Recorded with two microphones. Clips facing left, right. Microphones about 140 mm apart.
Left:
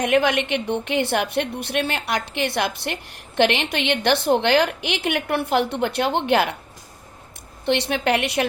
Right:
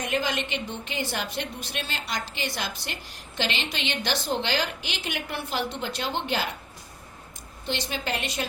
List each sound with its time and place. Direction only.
0.0 s a woman's voice: 65° left (ahead or behind)
7.6 s a woman's voice: 65° left (ahead or behind)